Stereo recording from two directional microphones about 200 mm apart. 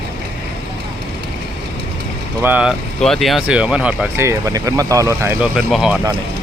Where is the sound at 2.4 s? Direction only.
5° right (ahead or behind).